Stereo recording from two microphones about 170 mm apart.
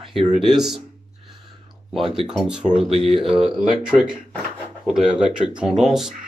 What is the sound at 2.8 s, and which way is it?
Speech, 35° right (ahead or behind).